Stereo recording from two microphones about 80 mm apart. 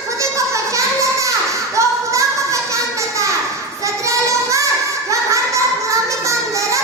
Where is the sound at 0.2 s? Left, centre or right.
Right.